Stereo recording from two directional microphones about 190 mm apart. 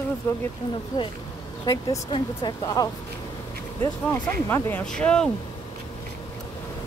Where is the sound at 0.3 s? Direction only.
15° left (ahead or behind).